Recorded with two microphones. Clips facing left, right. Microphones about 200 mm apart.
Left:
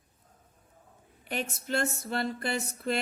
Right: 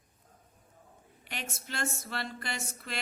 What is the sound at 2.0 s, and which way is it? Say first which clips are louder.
Speech: left 7 dB; 35° left (ahead or behind).